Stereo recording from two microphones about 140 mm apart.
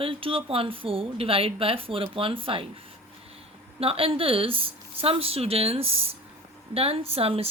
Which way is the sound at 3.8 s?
40° right (ahead or behind).